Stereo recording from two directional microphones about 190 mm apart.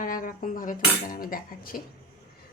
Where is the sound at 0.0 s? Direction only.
45° left (ahead or behind).